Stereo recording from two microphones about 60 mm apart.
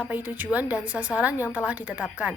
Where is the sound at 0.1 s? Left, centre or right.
Right.